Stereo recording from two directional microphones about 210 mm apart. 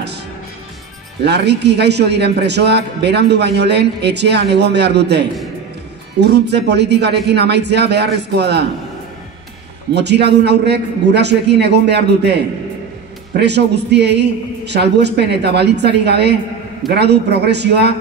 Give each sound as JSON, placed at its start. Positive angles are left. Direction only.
{"t": 1.2, "sound": "a man's voice", "side_deg": -55}
{"t": 9.9, "sound": "a man's voice", "side_deg": -55}